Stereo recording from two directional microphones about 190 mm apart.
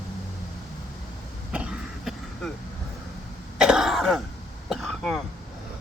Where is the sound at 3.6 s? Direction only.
5° right (ahead or behind).